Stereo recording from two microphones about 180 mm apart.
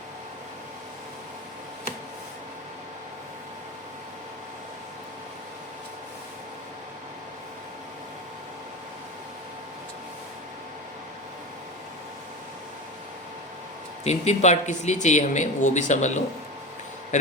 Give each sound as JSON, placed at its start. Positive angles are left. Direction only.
{"t": 14.0, "sound": "speech", "side_deg": 40}